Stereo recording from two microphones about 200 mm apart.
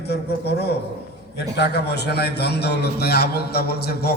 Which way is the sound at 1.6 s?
55° left (ahead or behind).